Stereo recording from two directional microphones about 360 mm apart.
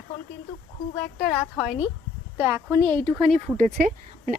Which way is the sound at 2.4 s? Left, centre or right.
Centre.